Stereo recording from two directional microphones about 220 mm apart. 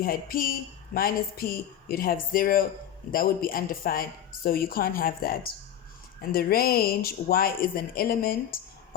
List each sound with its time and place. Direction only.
0.0 s speech: 40° left (ahead or behind)